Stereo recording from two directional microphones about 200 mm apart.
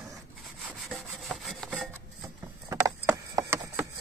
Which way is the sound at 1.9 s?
15° right (ahead or behind).